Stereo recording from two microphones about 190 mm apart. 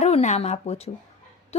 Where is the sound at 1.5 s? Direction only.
35° left (ahead or behind).